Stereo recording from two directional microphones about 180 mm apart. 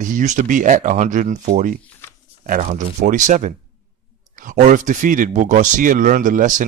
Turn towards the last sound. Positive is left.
turn(degrees=-45)  # may be behind; listen again after turning